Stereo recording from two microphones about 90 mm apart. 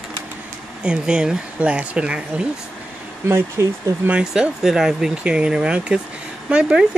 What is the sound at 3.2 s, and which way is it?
Speech, 30° right (ahead or behind).